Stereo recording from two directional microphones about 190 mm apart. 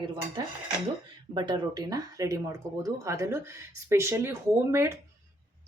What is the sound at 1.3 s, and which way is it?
Speech, 25° right (ahead or behind).